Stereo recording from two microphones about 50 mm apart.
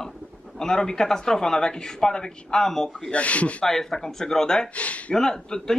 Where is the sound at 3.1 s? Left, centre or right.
Left.